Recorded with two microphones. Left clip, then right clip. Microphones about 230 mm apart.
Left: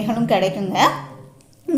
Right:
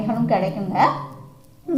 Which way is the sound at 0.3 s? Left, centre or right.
Left.